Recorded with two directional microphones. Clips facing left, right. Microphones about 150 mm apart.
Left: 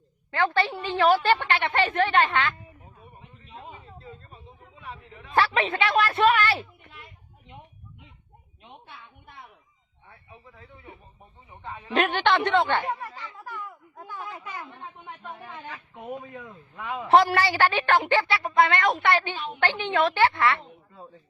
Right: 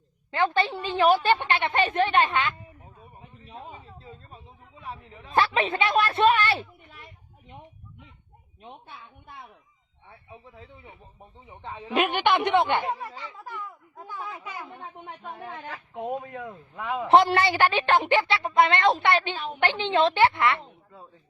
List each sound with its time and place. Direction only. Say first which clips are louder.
0.3 s a woman's voice: even; 20° right (ahead or behind)
4.8 s a man's voice: right 2 dB; 35° right (ahead or behind)
5.3 s a woman's voice: even; 20° right (ahead or behind)
11.6 s a woman's voice: right 1 dB; 25° right (ahead or behind)
11.9 s a woman's voice: even; 10° right (ahead or behind)
16.0 s a woman's voice: right 6 dB; 25° right (ahead or behind)